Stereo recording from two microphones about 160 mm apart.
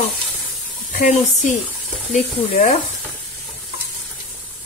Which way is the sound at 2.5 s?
45° left (ahead or behind).